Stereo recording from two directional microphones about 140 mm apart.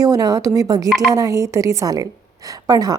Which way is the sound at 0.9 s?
Centre (ahead or behind).